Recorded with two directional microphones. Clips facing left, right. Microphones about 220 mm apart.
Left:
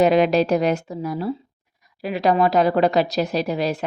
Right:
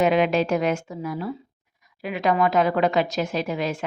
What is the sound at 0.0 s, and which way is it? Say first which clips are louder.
A woman's voice: left 4 dB; 35° left (ahead or behind).